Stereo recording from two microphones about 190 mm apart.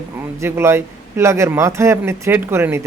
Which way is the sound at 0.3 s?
15° right (ahead or behind).